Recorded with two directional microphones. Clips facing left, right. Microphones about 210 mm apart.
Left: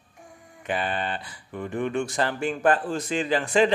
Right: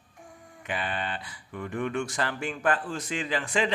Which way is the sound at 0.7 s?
35° left (ahead or behind).